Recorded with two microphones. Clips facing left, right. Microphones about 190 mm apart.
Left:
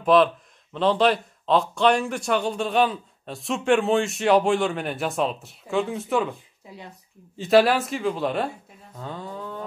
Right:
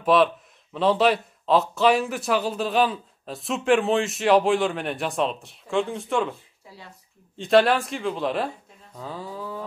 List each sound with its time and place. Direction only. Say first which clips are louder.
0.0 s speech: left 1 dB; centre (ahead or behind)
6.7 s speech: left 4 dB; 20° left (ahead or behind)
7.3 s speech: left 1 dB; centre (ahead or behind)
8.9 s cattle: even; centre (ahead or behind)